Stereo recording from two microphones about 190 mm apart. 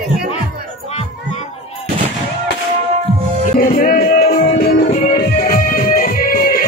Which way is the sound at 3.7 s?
50° left (ahead or behind).